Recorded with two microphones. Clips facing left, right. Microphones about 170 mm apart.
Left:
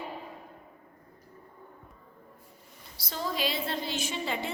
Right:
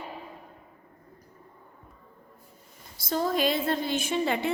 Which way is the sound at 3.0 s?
50° right (ahead or behind).